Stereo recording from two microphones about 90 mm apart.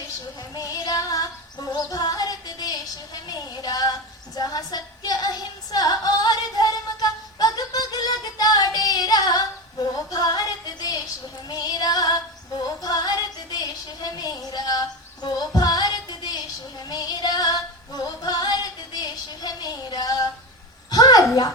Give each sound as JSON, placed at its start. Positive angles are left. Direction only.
{"t": 0.5, "sound": "female singing", "side_deg": 40}
{"t": 10.1, "sound": "music", "side_deg": 45}
{"t": 11.4, "sound": "female singing", "side_deg": 45}
{"t": 20.9, "sound": "a sound", "side_deg": 45}